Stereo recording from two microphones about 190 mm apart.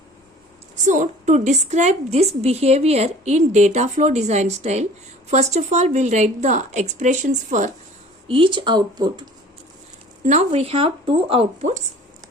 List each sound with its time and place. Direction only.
0.9 s a woman's voice: 40° right (ahead or behind)
8.3 s speech: 25° right (ahead or behind)
10.2 s a woman's voice: 35° right (ahead or behind)